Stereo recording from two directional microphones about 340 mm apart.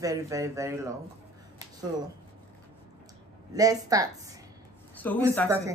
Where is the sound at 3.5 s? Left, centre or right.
Centre.